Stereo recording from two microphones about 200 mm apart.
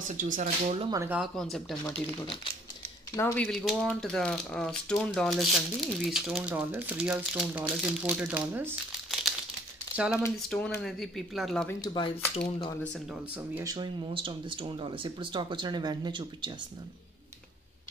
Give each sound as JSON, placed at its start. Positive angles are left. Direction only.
{"t": 0.2, "sound": "speech", "side_deg": -40}
{"t": 0.8, "sound": "speech", "side_deg": -15}
{"t": 1.2, "sound": "speech", "side_deg": 0}
{"t": 3.2, "sound": "speech", "side_deg": 10}
{"t": 10.5, "sound": "speech", "side_deg": 5}
{"t": 11.8, "sound": "speech", "side_deg": 25}
{"t": 12.8, "sound": "speech", "side_deg": 5}
{"t": 13.6, "sound": "speech", "side_deg": -20}